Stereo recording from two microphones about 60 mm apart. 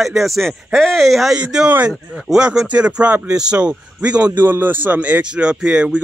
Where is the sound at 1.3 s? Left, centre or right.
Centre.